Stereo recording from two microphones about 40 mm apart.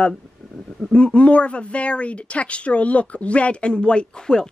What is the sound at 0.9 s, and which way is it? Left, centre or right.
Speech, left.